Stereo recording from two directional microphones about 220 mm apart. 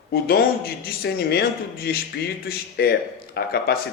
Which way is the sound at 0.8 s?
45° left (ahead or behind).